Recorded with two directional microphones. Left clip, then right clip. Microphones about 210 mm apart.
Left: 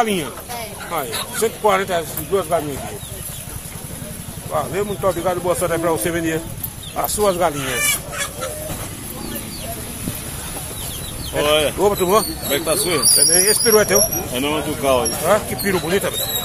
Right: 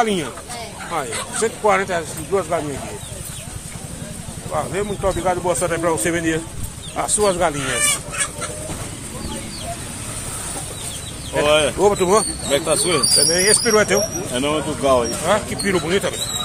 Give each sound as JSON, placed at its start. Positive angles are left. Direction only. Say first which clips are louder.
{"t": 0.0, "sound": "speech", "louder": "even", "side_deg": 0}
{"t": 4.5, "sound": "speech", "louder": "left 1 dB", "side_deg": 0}
{"t": 7.8, "sound": "fowl", "louder": "even", "side_deg": -55}
{"t": 11.4, "sound": "speech", "louder": "right 1 dB", "side_deg": -40}
{"t": 11.8, "sound": "speech", "louder": "even", "side_deg": -15}
{"t": 12.4, "sound": "speech", "louder": "right 1 dB", "side_deg": -40}
{"t": 13.2, "sound": "speech", "louder": "even", "side_deg": 0}
{"t": 14.3, "sound": "speech", "louder": "even", "side_deg": -30}
{"t": 15.2, "sound": "speech", "louder": "left 2 dB", "side_deg": -5}